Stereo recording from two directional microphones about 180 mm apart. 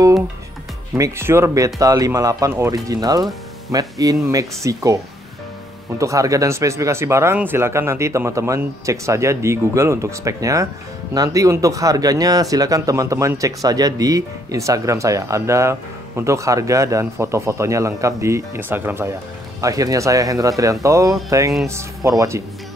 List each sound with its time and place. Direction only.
0.9 s speech: 15° right (ahead or behind)